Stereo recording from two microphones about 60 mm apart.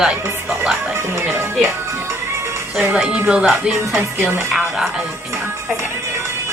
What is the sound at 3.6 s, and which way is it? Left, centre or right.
A woman's voice, centre.